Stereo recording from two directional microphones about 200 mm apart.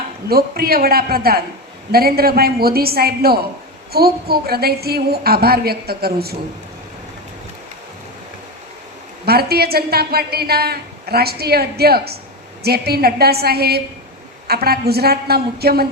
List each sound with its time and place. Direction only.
0.3 s a woman's voice: 50° right (ahead or behind)
9.2 s a woman's voice: 50° right (ahead or behind)